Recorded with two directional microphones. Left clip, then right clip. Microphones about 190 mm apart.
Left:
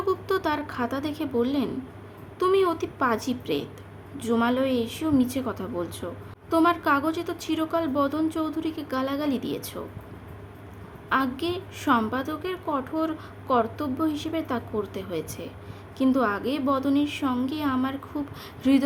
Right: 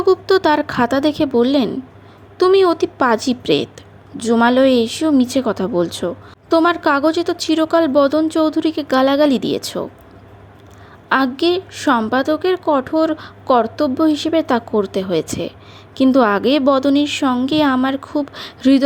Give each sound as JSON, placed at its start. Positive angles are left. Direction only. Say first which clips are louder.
{"t": 0.0, "sound": "a woman's voice", "louder": "right 12 dB", "side_deg": -30}
{"t": 11.1, "sound": "a woman's voice", "louder": "right 10 dB", "side_deg": -35}